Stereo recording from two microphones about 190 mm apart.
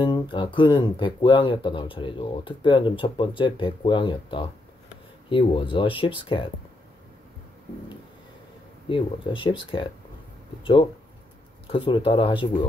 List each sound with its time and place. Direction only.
0.0 s speech: 25° left (ahead or behind)
8.8 s speech: 25° left (ahead or behind)